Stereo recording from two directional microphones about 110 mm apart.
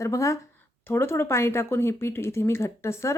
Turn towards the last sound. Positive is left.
turn(degrees=25)  # may be behind; listen again after turning